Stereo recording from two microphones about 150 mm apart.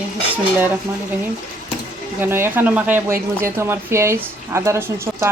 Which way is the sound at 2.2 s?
15° right (ahead or behind).